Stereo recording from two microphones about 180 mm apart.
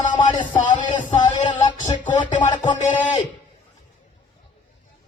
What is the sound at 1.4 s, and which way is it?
Music, 45° left (ahead or behind).